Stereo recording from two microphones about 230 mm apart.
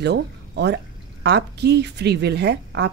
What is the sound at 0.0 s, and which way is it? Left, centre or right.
Speech, right.